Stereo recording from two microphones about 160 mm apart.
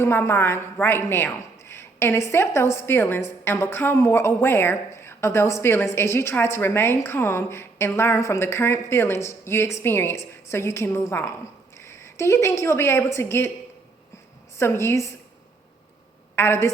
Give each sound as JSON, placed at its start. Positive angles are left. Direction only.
{"t": 0.0, "sound": "a woman's voice", "side_deg": 15}
{"t": 14.6, "sound": "a woman's voice", "side_deg": 15}
{"t": 16.3, "sound": "a woman's voice", "side_deg": 15}